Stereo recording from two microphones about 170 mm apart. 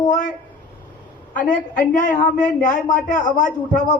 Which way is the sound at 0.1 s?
45° left (ahead or behind).